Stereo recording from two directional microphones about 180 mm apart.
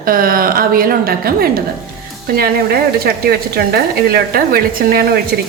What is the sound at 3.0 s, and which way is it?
A woman's voice, 60° right (ahead or behind).